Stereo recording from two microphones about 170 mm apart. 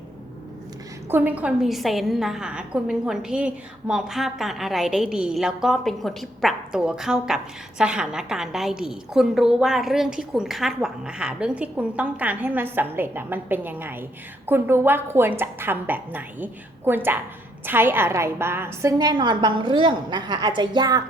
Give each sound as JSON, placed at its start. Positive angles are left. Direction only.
{"t": 1.1, "sound": "a woman's voice", "side_deg": -10}